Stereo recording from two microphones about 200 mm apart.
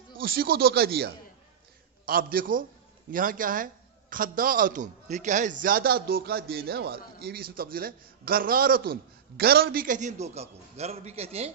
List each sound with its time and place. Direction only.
0.2 s a man's voice: 50° right (ahead or behind); by 11.5 s 30° right (ahead or behind)